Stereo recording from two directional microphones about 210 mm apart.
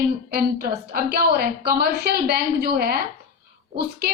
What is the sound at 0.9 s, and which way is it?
A woman's voice, 45° right (ahead or behind).